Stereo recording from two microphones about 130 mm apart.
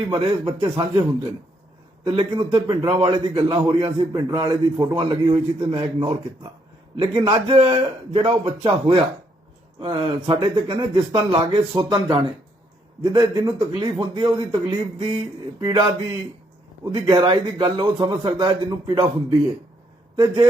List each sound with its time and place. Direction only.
0.1 s a man's voice: 35° right (ahead or behind)
2.0 s a man's voice: 40° right (ahead or behind)
16.9 s a man's voice: 40° right (ahead or behind)
20.1 s a man's voice: 35° right (ahead or behind)